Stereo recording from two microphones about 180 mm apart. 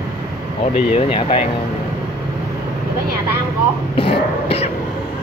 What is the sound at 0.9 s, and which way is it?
Speech, 30° left (ahead or behind).